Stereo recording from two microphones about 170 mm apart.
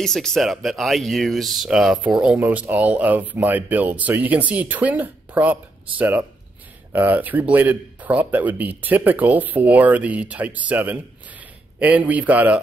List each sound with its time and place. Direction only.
0.0 s speech: centre (ahead or behind)